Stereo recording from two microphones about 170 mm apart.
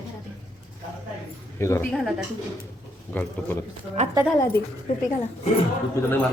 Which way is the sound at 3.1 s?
10° left (ahead or behind).